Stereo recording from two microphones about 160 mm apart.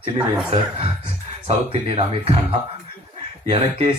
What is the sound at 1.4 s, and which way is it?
Speech, 35° right (ahead or behind).